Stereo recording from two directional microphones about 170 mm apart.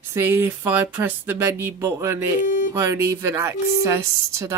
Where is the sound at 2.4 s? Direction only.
50° left (ahead or behind).